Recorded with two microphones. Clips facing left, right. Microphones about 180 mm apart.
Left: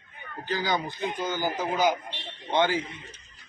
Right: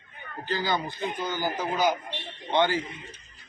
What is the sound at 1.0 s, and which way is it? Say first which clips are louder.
Speech: left 1 dB; 15° left (ahead or behind).